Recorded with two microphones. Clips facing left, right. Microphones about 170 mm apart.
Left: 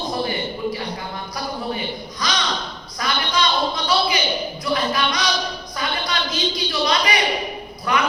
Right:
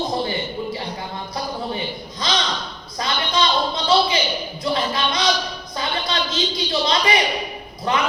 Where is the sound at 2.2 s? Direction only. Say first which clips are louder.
Right 1 dB; 25° right (ahead or behind).